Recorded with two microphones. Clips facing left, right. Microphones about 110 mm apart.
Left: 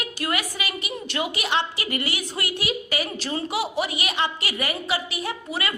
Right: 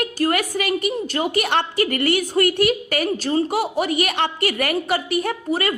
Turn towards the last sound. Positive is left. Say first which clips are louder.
# right 7 dB
turn(degrees=-45)  # may be behind; listen again after turning